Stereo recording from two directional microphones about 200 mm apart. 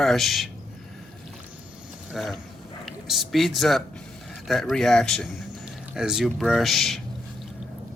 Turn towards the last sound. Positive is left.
turn(degrees=0)  # may be behind; listen again after turning